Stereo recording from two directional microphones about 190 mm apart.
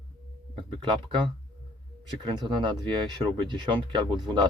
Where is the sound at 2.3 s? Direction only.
25° right (ahead or behind).